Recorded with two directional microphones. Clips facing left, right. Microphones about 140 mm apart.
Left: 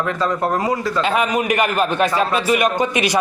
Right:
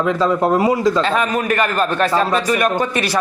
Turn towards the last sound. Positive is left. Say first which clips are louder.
# even
turn(degrees=15)  # may be behind; listen again after turning